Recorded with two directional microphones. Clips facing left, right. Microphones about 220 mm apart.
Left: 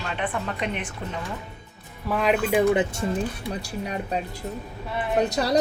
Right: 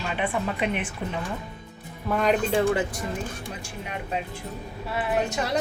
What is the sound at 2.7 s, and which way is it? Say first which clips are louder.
Speech: left 3 dB; 25° left (ahead or behind).